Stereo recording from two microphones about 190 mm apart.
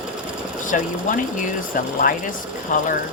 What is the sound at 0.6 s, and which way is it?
Speech, 45° left (ahead or behind).